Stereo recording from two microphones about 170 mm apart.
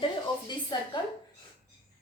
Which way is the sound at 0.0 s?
25° left (ahead or behind).